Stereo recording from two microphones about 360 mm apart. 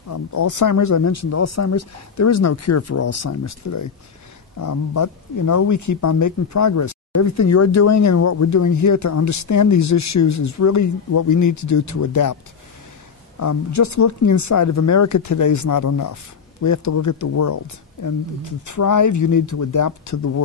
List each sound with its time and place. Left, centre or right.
0.1 s speech: left
13.4 s speech: left